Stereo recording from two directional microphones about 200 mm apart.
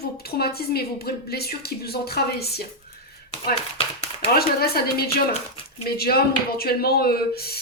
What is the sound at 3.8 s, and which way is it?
Speech, 30° left (ahead or behind).